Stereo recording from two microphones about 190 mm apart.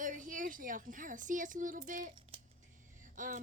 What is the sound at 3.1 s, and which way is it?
Speech, 45° right (ahead or behind).